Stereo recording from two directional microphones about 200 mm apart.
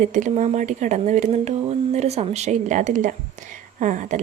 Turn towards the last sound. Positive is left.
turn(degrees=-40)  # may be behind; listen again after turning